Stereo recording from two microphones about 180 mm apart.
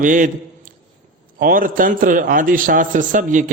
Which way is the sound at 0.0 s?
45° right (ahead or behind).